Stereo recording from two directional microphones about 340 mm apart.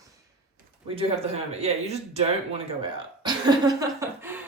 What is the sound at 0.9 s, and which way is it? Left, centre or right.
Speech, centre.